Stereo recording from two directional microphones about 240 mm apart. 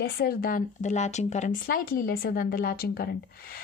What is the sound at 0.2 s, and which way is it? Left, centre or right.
Speech, left.